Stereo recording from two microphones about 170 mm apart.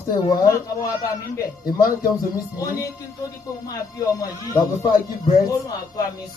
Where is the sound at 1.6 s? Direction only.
60° left (ahead or behind).